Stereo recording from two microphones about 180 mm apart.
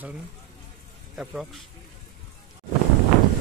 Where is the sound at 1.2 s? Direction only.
5° right (ahead or behind).